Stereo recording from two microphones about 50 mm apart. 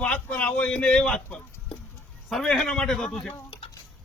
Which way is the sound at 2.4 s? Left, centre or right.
Centre.